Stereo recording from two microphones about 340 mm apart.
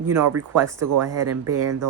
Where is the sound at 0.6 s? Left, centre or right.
Centre.